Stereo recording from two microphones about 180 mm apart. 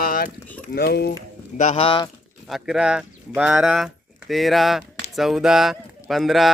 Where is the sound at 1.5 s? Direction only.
35° left (ahead or behind).